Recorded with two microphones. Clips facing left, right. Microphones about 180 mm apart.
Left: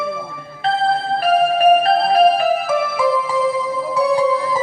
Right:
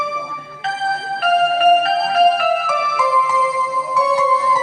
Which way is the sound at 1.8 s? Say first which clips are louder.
Left 1 dB; 35° left (ahead or behind).